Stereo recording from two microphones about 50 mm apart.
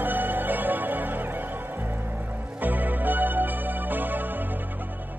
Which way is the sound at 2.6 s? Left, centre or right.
Right.